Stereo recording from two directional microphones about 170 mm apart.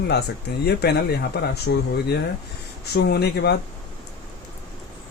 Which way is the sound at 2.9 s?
75° left (ahead or behind).